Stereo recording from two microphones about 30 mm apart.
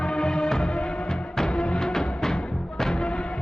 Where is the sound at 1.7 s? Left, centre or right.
Left.